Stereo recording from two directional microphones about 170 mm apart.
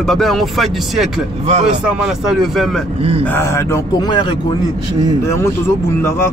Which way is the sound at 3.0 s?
35° right (ahead or behind).